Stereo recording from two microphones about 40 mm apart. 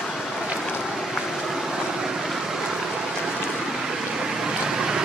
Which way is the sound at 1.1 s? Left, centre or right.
Centre.